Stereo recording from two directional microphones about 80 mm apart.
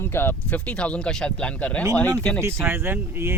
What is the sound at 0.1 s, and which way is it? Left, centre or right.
Speech, left.